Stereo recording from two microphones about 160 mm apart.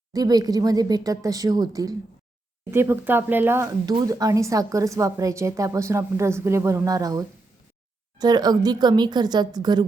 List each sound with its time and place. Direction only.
0.1 s speech: 25° right (ahead or behind)